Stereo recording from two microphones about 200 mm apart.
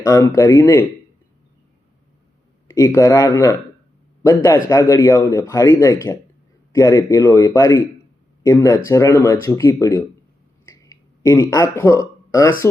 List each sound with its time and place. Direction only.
0.0 s speech: 15° left (ahead or behind)
2.6 s speech: 15° left (ahead or behind)
10.7 s a sound: 15° left (ahead or behind)